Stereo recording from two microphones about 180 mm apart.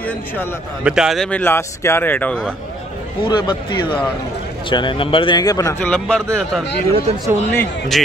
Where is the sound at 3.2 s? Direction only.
25° left (ahead or behind).